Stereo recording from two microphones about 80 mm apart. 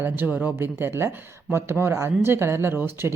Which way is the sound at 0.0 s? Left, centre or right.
Right.